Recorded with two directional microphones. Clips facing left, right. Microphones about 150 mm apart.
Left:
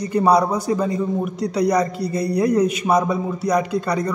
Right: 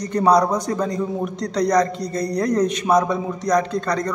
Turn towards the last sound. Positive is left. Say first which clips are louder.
# left 1 dB
turn(degrees=10)  # may be behind; listen again after turning